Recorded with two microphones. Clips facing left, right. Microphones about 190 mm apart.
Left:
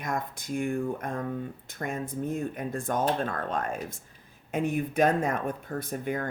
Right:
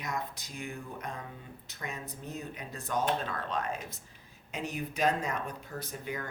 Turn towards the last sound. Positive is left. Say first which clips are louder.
# left 7 dB
turn(degrees=55)  # may be behind; listen again after turning